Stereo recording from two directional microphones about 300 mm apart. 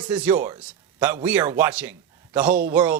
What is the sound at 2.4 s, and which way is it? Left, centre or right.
Speech, right.